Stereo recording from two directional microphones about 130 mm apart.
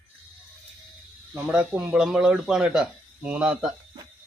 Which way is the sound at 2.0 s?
5° right (ahead or behind).